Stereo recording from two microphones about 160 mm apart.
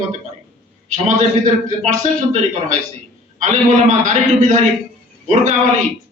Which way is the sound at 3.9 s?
50° right (ahead or behind).